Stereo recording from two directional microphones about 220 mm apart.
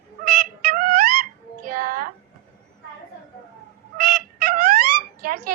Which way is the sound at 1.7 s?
40° right (ahead or behind).